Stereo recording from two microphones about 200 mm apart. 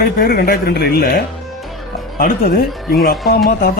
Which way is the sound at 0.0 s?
50° left (ahead or behind).